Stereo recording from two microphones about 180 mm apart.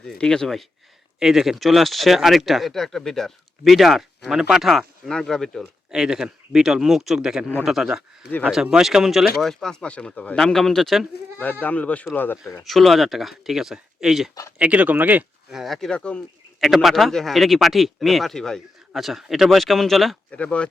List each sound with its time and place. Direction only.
0.0 s speech: 5° left (ahead or behind)